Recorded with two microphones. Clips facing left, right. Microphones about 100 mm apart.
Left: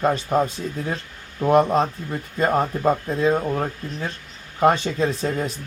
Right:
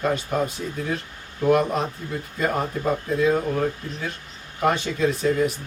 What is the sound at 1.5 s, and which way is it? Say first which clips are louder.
Speech: left 3 dB; 35° left (ahead or behind).